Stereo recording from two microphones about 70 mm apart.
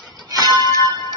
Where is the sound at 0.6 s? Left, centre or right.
Left.